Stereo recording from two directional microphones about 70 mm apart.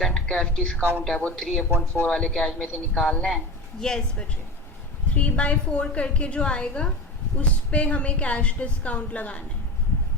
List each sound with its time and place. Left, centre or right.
0.0 s a man's voice: centre